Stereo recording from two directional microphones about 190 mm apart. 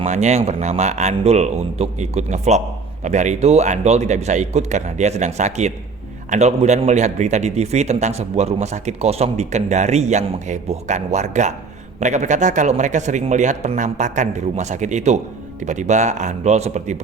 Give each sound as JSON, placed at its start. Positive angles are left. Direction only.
{"t": 0.0, "sound": "a man's voice", "side_deg": -35}